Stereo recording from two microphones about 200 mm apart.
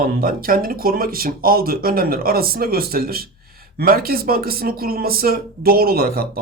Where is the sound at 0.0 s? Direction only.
45° right (ahead or behind).